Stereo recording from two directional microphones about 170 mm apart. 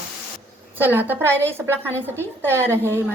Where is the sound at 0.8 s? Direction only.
10° right (ahead or behind).